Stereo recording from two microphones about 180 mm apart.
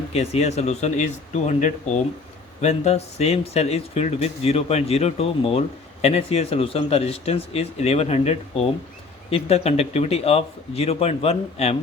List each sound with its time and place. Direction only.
0.1 s speech: 35° left (ahead or behind)